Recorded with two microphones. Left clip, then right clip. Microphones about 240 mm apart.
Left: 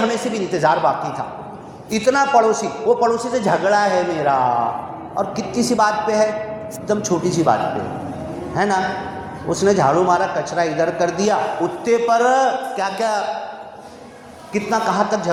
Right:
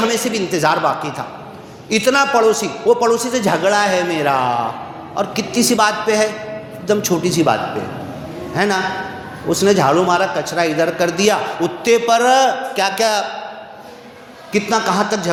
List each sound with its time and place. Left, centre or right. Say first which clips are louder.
0.1 s a man's voice: right 3 dB; right
14.5 s a man's voice: right 2 dB; right